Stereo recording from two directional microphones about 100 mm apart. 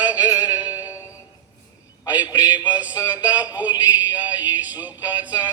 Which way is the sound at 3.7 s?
40° left (ahead or behind).